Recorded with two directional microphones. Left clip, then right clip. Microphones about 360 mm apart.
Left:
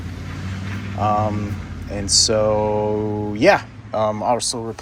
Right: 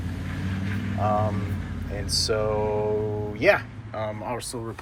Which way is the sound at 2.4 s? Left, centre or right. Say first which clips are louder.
Left 7 dB; left.